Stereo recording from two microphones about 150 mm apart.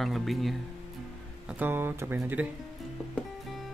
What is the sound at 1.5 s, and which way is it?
Speech, 15° right (ahead or behind).